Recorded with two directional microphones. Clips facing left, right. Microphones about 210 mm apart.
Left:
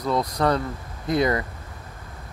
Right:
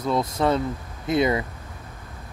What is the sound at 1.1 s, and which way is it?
Speech, 25° right (ahead or behind).